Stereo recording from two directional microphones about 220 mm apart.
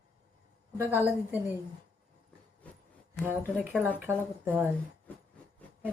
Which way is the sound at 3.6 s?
5° right (ahead or behind).